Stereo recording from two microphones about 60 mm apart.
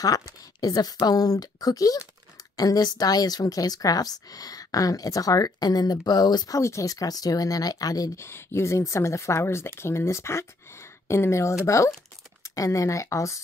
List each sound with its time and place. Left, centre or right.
0.6 s speech: left
6.6 s speech: left
8.2 s speech: left